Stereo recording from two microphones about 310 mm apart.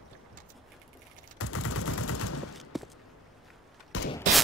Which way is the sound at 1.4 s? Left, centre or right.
Left.